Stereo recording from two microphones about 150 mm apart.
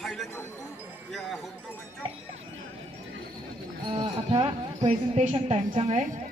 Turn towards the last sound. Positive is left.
turn(degrees=-45)  # may be behind; listen again after turning